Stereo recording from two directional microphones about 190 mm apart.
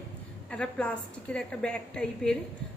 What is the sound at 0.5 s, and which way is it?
A woman's voice, 5° left (ahead or behind).